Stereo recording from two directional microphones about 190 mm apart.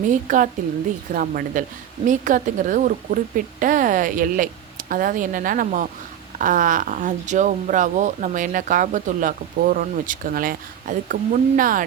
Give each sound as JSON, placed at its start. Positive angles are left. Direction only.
{"t": 0.1, "sound": "speech", "side_deg": -45}